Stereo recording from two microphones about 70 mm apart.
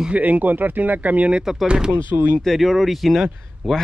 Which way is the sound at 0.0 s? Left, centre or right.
Right.